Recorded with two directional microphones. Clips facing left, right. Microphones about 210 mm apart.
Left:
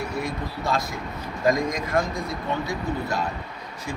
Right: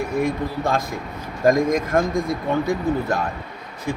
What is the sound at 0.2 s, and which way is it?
A man's voice, 50° right (ahead or behind).